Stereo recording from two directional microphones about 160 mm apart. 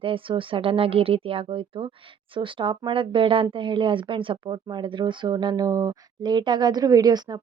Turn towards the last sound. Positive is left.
turn(degrees=-25)  # may be behind; listen again after turning